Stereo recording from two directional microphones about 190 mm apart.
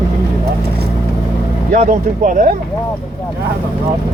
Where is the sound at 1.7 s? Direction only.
45° right (ahead or behind).